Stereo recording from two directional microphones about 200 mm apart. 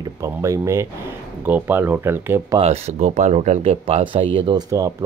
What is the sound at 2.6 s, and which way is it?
Speech, 30° right (ahead or behind).